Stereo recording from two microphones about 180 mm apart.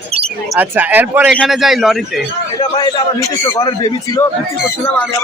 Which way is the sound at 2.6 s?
25° left (ahead or behind).